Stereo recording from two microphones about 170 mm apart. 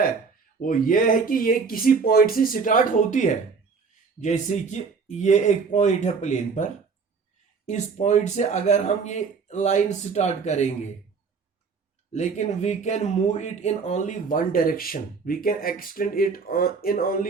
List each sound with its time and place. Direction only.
0.6 s speech: 55° left (ahead or behind)
7.7 s speech: 45° left (ahead or behind)
12.1 s speech: 40° left (ahead or behind); by 17.2 s 60° left (ahead or behind)